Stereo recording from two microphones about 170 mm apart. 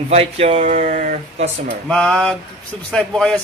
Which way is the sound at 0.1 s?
35° right (ahead or behind).